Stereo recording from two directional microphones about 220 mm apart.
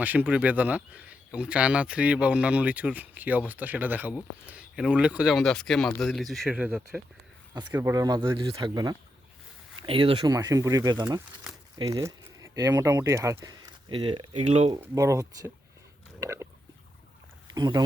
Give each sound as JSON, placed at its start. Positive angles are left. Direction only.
{"t": 0.0, "sound": "speech", "side_deg": -5}
{"t": 11.5, "sound": "crumpling", "side_deg": -5}
{"t": 11.8, "sound": "speech", "side_deg": -20}
{"t": 14.8, "sound": "speech", "side_deg": -15}
{"t": 17.5, "sound": "speech", "side_deg": -20}